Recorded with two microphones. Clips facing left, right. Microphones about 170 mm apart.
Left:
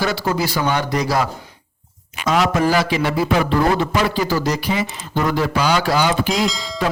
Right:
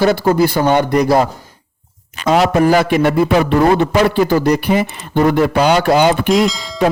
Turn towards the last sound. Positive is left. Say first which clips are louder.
# right 7 dB
turn(degrees=0)  # may be behind; listen again after turning